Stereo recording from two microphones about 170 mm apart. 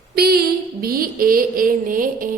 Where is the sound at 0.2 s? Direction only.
65° right (ahead or behind).